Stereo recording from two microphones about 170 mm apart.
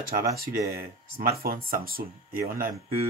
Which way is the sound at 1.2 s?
60° right (ahead or behind).